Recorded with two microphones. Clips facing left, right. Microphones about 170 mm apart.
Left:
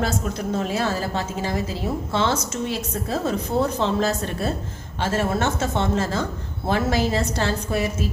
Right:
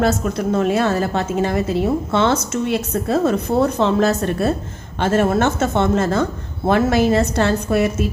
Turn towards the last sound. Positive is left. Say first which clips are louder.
# right 7 dB
turn(degrees=-60)  # may be behind; listen again after turning